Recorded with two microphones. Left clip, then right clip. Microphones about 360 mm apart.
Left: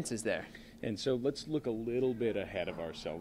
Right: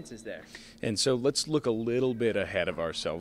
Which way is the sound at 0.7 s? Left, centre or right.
Right.